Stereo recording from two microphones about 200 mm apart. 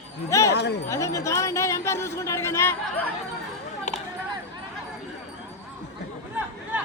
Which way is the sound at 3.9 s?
35° left (ahead or behind).